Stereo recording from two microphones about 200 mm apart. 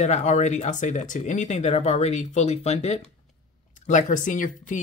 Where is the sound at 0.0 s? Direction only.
35° left (ahead or behind).